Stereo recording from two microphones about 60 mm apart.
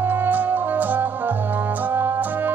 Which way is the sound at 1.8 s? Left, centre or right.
Right.